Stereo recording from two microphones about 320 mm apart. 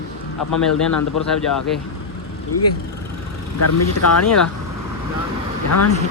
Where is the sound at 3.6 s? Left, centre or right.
Left.